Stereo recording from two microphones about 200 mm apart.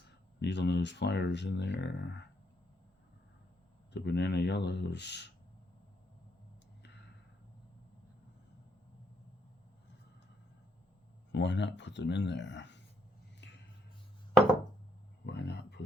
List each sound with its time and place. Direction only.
0.3 s speech: 60° left (ahead or behind)
3.9 s speech: 60° left (ahead or behind)
11.3 s speech: 65° left (ahead or behind)
13.4 s a sound: 60° left (ahead or behind)
15.3 s speech: 60° left (ahead or behind)